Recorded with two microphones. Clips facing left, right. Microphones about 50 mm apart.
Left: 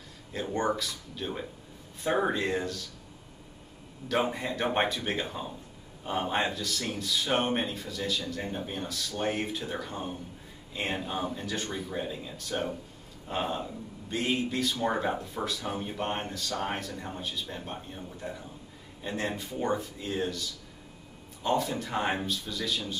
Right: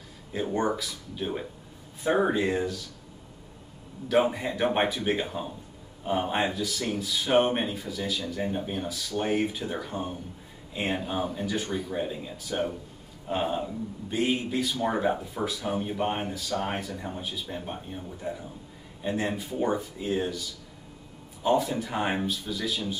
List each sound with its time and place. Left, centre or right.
0.3 s speech: centre
4.1 s speech: centre